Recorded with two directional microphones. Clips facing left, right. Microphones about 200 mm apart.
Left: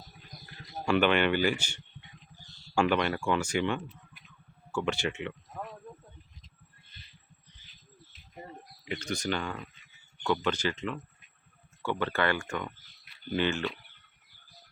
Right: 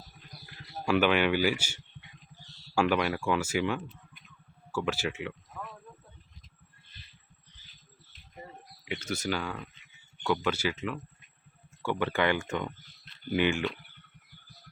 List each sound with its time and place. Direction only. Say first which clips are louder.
0.9 s speech: even; 5° right (ahead or behind)
8.8 s speech: even; 5° right (ahead or behind)